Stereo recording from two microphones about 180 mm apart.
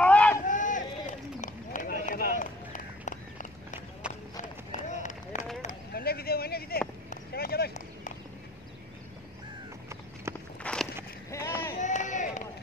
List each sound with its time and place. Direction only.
0.0 s a sound: 5° left (ahead or behind)
0.4 s run: 45° left (ahead or behind)
4.4 s run: 45° left (ahead or behind)
5.6 s a sound: 50° left (ahead or behind)
10.6 s walk: 5° left (ahead or behind)
11.2 s vehicle: 15° left (ahead or behind)
11.8 s run: 40° left (ahead or behind)